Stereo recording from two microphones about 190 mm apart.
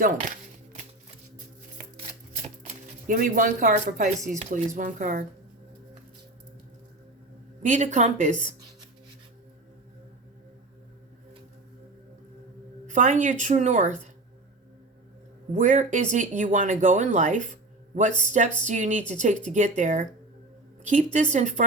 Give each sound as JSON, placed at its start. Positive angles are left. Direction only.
{"t": 0.0, "sound": "a sound", "side_deg": -45}
{"t": 2.0, "sound": "shuffling cards", "side_deg": -35}
{"t": 3.2, "sound": "speech", "side_deg": -45}
{"t": 7.6, "sound": "speech", "side_deg": -40}
{"t": 12.9, "sound": "speech", "side_deg": -40}
{"t": 15.5, "sound": "speech", "side_deg": -40}